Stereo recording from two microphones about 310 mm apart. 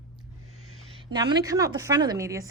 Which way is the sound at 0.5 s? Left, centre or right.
Right.